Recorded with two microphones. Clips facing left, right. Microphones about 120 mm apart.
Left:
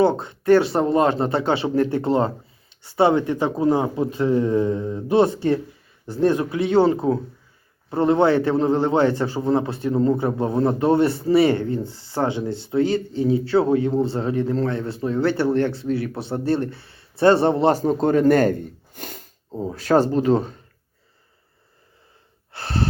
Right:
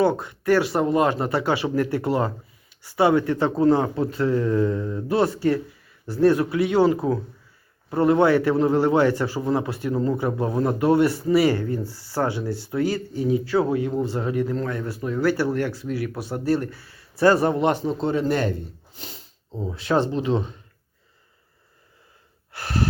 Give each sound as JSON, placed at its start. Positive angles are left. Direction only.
{"t": 0.0, "sound": "a man's voice", "side_deg": 25}
{"t": 19.5, "sound": "speech", "side_deg": 35}
{"t": 22.5, "sound": "gasp", "side_deg": 30}